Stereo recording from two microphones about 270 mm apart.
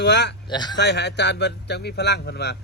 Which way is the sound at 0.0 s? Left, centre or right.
Left.